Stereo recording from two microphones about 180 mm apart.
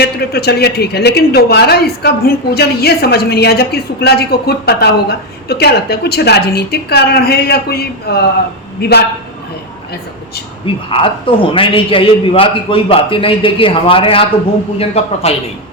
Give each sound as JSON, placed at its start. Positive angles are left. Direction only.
{"t": 0.0, "sound": "a woman's voice", "side_deg": 60}
{"t": 10.8, "sound": "a man's voice", "side_deg": 30}